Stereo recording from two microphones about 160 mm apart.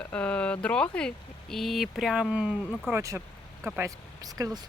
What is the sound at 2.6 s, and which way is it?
Speech, 10° left (ahead or behind).